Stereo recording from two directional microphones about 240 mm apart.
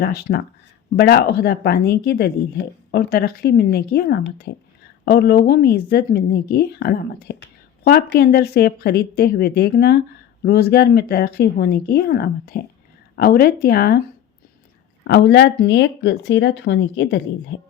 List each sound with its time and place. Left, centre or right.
0.0 s a woman's voice: left
15.0 s speech: left